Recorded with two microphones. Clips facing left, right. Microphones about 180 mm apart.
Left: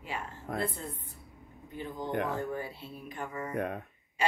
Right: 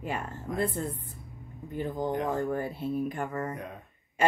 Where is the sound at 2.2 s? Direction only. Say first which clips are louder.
Right 5 dB; 50° right (ahead or behind).